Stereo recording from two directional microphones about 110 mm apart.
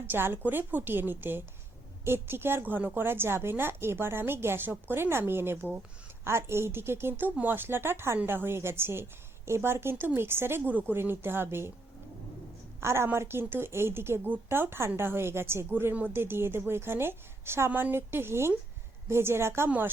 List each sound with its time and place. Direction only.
0.1 s a woman's voice: 20° right (ahead or behind)
12.8 s a woman's voice: 25° right (ahead or behind)